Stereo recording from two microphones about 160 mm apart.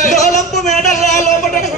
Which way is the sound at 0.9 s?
50° left (ahead or behind).